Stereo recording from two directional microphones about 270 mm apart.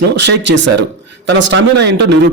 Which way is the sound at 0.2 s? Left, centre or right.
Right.